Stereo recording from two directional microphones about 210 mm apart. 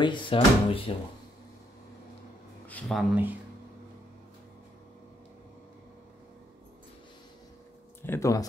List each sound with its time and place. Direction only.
0.0 s speech: 25° left (ahead or behind)
2.7 s speech: centre (ahead or behind)
8.0 s speech: 10° left (ahead or behind)